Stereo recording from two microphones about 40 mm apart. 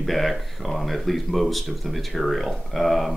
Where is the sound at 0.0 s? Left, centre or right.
Centre.